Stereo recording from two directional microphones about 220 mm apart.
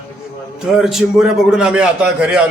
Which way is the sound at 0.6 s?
Centre (ahead or behind).